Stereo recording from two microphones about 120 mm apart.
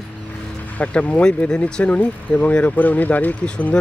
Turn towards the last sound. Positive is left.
turn(degrees=10)  # may be behind; listen again after turning